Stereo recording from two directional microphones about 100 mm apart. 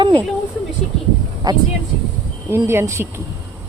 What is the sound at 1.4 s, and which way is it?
Speech, 40° right (ahead or behind).